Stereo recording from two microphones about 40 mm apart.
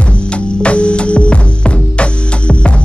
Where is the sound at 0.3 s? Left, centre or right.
Left.